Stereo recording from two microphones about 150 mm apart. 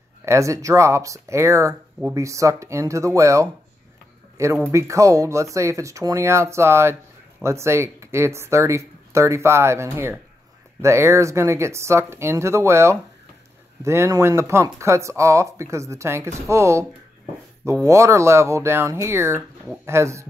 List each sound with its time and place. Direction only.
0.2 s speech: 20° right (ahead or behind)
4.6 s speech: 15° right (ahead or behind)
17.8 s speech: 20° right (ahead or behind)